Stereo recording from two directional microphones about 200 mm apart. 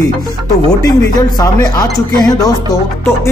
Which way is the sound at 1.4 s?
20° left (ahead or behind).